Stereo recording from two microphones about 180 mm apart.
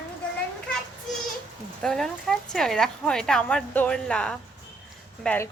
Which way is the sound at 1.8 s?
Centre (ahead or behind).